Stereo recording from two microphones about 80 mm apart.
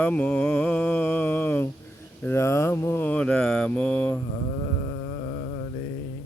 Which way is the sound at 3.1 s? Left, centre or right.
Centre.